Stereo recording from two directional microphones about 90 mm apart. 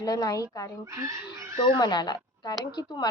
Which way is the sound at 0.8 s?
35° right (ahead or behind).